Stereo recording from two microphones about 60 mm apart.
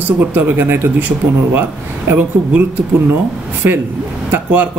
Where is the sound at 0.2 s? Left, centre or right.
Right.